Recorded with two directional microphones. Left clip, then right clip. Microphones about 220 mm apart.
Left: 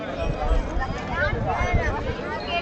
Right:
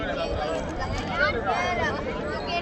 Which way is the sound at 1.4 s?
40° right (ahead or behind).